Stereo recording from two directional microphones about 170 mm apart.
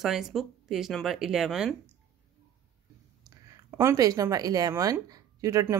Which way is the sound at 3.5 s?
15° right (ahead or behind).